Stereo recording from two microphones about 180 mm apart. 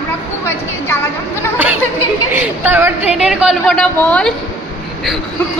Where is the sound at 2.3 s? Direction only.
10° right (ahead or behind); by 4.3 s 5° left (ahead or behind).